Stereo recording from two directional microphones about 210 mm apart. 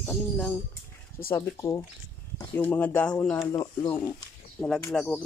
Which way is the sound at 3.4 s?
20° left (ahead or behind).